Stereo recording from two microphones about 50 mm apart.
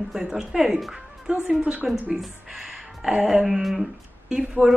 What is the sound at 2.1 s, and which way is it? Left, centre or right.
Speech, centre.